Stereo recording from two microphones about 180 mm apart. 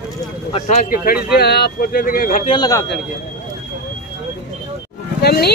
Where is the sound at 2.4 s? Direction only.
25° left (ahead or behind).